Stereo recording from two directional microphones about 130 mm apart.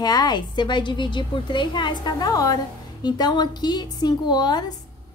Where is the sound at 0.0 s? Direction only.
30° left (ahead or behind).